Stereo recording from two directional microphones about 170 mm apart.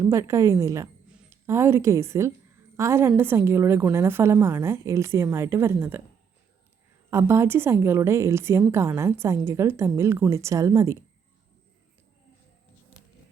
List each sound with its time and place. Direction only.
0.0 s a woman's voice: 15° right (ahead or behind)
7.1 s a woman's voice: 15° right (ahead or behind)